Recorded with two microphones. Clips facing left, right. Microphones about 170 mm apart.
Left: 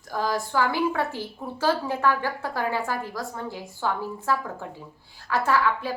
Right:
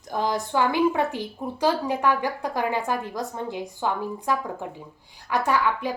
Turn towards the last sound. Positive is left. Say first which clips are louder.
# even
turn(degrees=-15)  # may be behind; listen again after turning